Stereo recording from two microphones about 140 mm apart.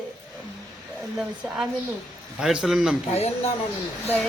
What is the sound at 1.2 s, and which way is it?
Speech, 5° right (ahead or behind).